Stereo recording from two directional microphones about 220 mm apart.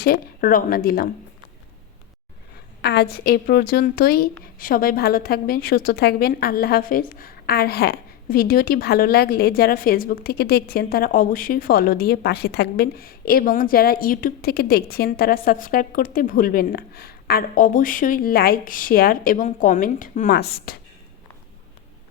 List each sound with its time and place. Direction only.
0.0 s speech: 40° left (ahead or behind)
2.8 s a woman's voice: 45° left (ahead or behind)